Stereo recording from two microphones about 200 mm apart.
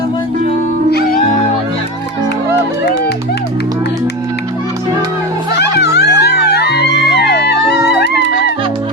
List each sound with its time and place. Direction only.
0.9 s music: 50° left (ahead or behind)
5.5 s music: 55° left (ahead or behind)